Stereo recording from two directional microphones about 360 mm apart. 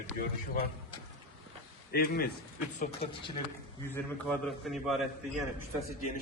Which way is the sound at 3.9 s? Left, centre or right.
Centre.